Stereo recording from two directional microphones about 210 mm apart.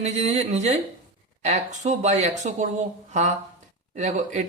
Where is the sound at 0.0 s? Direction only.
35° right (ahead or behind).